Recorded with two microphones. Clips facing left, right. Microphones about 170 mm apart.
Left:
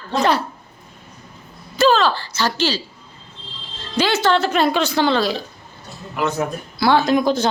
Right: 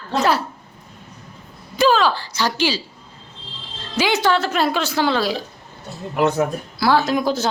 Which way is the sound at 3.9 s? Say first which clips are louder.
Left 1 dB; 10° right (ahead or behind).